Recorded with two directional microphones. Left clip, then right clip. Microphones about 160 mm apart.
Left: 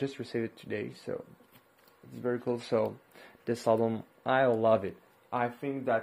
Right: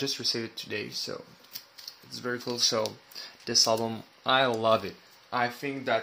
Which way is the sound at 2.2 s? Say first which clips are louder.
Right 3 dB; 15° left (ahead or behind).